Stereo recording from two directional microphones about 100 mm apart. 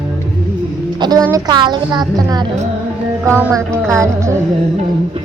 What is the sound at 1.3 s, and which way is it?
A woman's voice, 45° right (ahead or behind).